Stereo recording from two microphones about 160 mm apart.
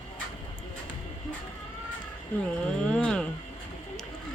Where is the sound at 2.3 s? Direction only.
10° left (ahead or behind).